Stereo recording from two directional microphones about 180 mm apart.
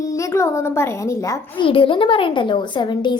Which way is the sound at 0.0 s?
15° left (ahead or behind).